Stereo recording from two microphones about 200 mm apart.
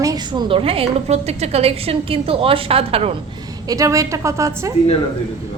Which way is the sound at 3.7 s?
15° right (ahead or behind).